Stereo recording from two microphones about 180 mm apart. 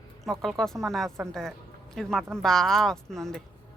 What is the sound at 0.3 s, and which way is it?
Speech, centre (ahead or behind).